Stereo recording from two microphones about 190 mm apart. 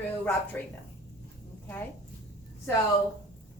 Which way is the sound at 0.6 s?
10° left (ahead or behind).